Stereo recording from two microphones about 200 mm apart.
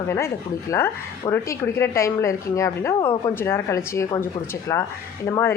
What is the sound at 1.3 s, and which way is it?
A woman's voice, 15° left (ahead or behind).